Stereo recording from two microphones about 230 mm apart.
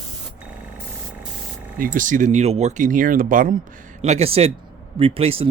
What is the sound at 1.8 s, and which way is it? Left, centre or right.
Speech, right.